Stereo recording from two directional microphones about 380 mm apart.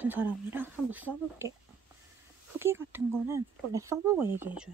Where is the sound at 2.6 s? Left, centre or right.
Centre.